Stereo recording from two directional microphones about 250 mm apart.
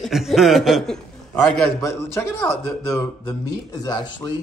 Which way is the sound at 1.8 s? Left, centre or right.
Centre.